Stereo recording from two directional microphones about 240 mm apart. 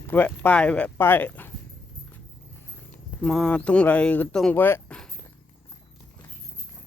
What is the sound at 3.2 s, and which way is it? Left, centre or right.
Speech, centre.